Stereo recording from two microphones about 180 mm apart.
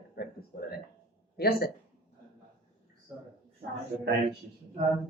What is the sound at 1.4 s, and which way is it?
Speech, 60° left (ahead or behind).